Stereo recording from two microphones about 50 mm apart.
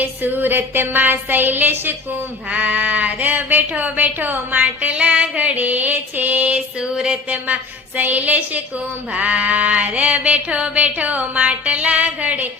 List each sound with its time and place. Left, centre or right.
0.0 s sheep: right
2.5 s sheep: right
6.7 s sheep: centre
7.3 s sheep: right